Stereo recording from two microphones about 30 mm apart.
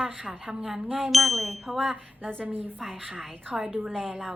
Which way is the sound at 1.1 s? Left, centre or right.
Centre.